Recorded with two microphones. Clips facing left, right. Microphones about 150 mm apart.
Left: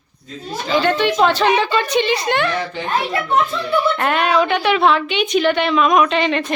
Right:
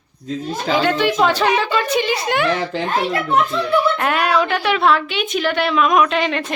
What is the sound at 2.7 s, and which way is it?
Speech, 90° right.